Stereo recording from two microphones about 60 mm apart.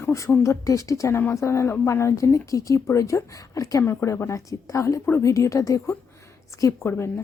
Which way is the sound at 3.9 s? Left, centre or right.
Left.